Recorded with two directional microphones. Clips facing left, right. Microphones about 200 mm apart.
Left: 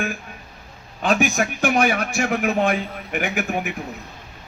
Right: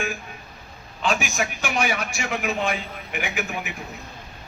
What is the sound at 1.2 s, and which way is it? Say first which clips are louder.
A man's voice: left 7 dB; 55° left (ahead or behind).